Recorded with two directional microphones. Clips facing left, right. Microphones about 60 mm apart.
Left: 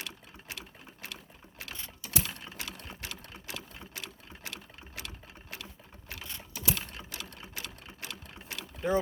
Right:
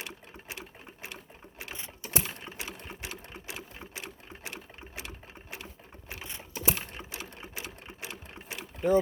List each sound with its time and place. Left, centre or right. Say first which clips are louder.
0.0 s sewing machine: right 2 dB; right